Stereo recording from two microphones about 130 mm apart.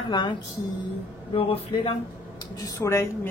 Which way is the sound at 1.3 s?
45° left (ahead or behind).